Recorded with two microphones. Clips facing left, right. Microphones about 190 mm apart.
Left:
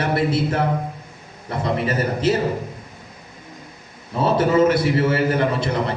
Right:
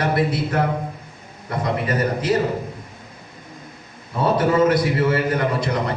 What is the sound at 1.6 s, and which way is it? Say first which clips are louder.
Speech: even; 25° left (ahead or behind).